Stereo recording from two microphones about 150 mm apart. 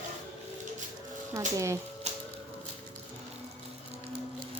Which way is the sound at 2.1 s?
45° right (ahead or behind).